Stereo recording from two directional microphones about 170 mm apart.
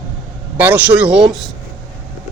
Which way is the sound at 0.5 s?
10° right (ahead or behind).